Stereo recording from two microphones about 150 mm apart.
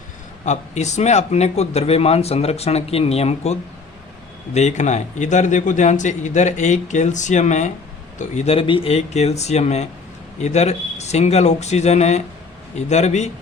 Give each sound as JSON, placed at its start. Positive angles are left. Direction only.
{"t": 0.4, "sound": "speech", "side_deg": 50}